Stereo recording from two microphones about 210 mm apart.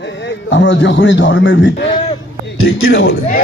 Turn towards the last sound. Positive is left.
turn(degrees=60)  # may be behind; listen again after turning